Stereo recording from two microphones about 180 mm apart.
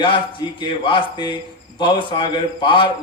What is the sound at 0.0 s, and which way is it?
Speech, 25° left (ahead or behind).